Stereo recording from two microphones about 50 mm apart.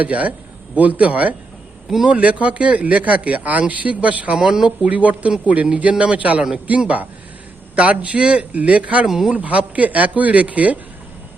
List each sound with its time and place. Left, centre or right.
0.0 s a man's voice: right
4.4 s speech: centre
4.9 s a man's voice: right
9.0 s speech: centre
9.3 s speech: right